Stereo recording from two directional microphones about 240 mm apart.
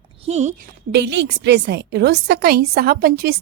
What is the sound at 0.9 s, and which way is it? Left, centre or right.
A woman's voice, right.